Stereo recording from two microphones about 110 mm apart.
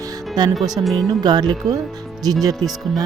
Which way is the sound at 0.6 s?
35° right (ahead or behind).